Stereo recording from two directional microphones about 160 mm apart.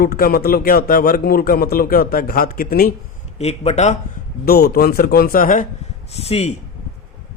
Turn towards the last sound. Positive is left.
turn(degrees=40)  # may be behind; listen again after turning